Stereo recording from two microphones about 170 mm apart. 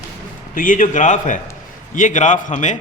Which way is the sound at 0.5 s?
50° left (ahead or behind).